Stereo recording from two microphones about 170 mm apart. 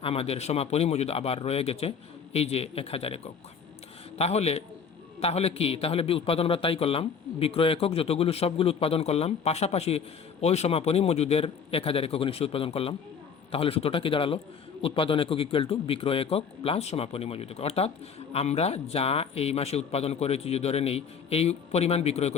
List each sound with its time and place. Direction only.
0.0 s a man's voice: 35° left (ahead or behind)
4.2 s a man's voice: 40° left (ahead or behind)